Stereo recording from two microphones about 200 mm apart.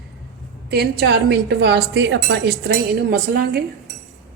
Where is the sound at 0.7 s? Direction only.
55° right (ahead or behind).